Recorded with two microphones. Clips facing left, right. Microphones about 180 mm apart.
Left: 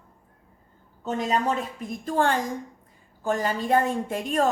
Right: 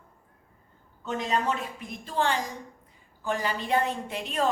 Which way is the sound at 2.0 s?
50° left (ahead or behind).